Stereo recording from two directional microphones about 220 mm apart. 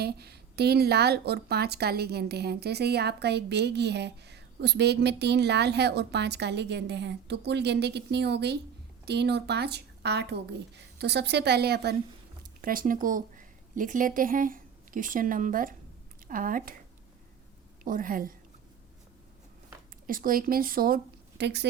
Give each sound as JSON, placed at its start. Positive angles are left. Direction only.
{"t": 0.0, "sound": "a woman's voice", "side_deg": -45}
{"t": 17.8, "sound": "a woman's voice", "side_deg": -40}
{"t": 20.1, "sound": "speech", "side_deg": -40}